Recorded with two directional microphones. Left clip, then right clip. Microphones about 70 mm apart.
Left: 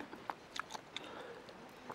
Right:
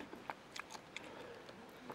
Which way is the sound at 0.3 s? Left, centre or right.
Left.